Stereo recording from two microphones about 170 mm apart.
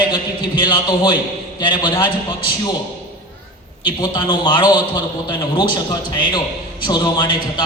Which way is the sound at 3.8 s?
25° left (ahead or behind).